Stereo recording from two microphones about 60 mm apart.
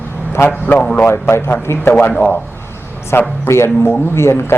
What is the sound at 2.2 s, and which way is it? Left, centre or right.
Speech, left.